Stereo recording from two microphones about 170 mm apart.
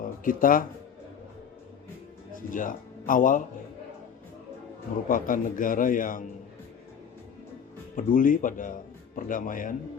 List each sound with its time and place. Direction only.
0.0 s music: 55° left (ahead or behind)
2.3 s speech: 50° left (ahead or behind)
5.0 s speech: 55° left (ahead or behind)
7.9 s speech: 55° left (ahead or behind)